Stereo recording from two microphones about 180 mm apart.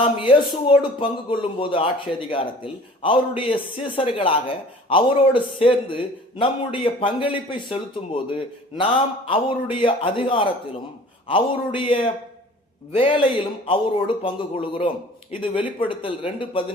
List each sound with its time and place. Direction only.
0.0 s speech: 30° left (ahead or behind)